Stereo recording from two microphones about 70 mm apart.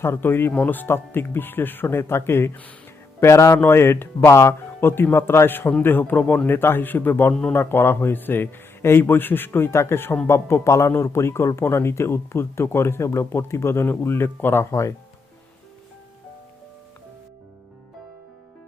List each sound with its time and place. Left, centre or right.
0.0 s a man's voice: left
14.7 s speech: left